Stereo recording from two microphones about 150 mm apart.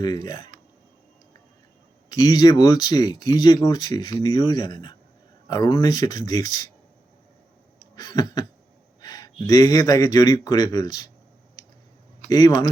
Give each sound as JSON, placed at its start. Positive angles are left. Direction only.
{"t": 0.0, "sound": "speech", "side_deg": 25}
{"t": 2.0, "sound": "speech", "side_deg": 25}
{"t": 7.8, "sound": "a sound", "side_deg": 25}
{"t": 9.0, "sound": "speech", "side_deg": 25}
{"t": 12.3, "sound": "speech", "side_deg": 30}